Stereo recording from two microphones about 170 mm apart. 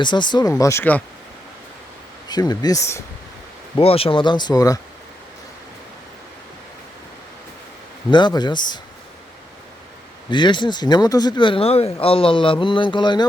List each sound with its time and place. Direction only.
0.0 s speech: 25° left (ahead or behind)
0.5 s speech: 15° left (ahead or behind)
2.3 s speech: 25° left (ahead or behind)
3.8 s speech: 35° left (ahead or behind)
8.1 s speech: 25° left (ahead or behind)
10.2 s speech: 25° left (ahead or behind)